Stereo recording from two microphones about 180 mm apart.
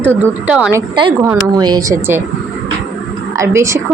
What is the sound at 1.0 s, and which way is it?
A woman's voice, 25° right (ahead or behind).